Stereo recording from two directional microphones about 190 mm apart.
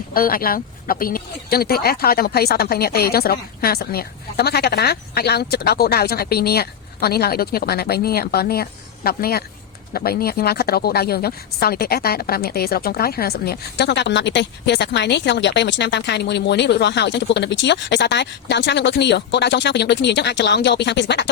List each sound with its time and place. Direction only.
0.1 s speech: 50° left (ahead or behind)